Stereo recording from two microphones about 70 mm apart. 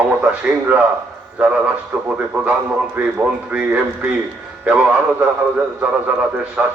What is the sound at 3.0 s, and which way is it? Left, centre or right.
Speech, centre.